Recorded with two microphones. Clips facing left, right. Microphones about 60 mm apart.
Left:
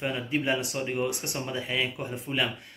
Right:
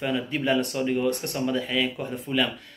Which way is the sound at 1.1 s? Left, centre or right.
Centre.